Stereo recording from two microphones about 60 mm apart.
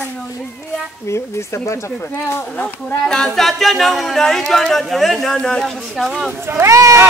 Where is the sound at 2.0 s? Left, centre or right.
Left.